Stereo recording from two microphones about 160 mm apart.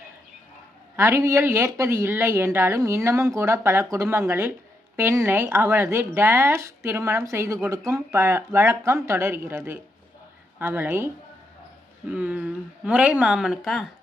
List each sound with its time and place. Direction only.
0.9 s speech: 15° right (ahead or behind)
12.1 s speech: 10° right (ahead or behind)